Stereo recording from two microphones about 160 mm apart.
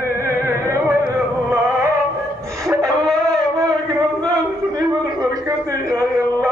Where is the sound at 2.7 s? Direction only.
20° right (ahead or behind).